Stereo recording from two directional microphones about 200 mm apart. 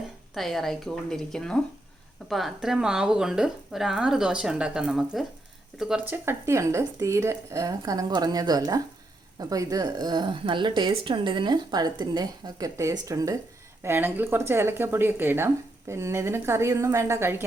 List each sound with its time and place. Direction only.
0.3 s a woman's voice: centre (ahead or behind)